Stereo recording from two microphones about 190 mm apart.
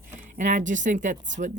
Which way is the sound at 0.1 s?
40° right (ahead or behind).